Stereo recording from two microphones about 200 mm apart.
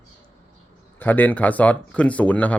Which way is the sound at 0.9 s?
10° left (ahead or behind).